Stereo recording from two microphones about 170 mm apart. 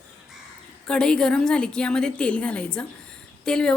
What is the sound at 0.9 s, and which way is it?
A woman's voice, 5° left (ahead or behind).